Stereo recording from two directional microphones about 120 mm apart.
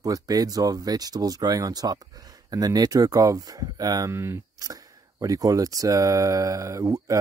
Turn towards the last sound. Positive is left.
turn(degrees=-25)  # may be behind; listen again after turning